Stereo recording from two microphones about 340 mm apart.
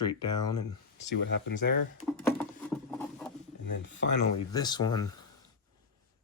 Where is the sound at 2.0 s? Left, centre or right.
Centre.